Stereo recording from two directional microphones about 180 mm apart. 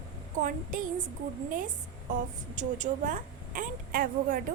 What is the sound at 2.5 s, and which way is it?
A woman's voice, 45° right (ahead or behind).